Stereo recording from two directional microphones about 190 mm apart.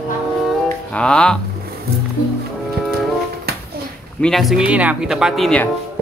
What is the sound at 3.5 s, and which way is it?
Music, 55° right (ahead or behind).